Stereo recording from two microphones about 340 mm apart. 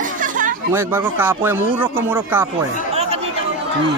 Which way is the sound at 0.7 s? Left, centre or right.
Centre.